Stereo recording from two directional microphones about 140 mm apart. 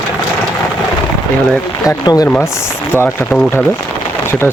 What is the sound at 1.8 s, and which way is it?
Speech, 25° left (ahead or behind).